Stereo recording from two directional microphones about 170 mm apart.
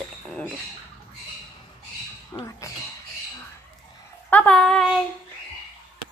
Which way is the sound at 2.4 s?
20° left (ahead or behind).